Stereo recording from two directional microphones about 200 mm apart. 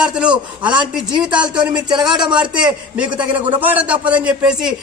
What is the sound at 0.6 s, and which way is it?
Speech, 25° right (ahead or behind).